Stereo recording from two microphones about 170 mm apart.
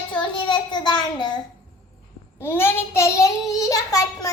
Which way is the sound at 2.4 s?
15° left (ahead or behind).